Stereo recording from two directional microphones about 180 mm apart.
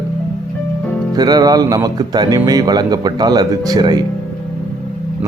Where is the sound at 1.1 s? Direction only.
20° right (ahead or behind).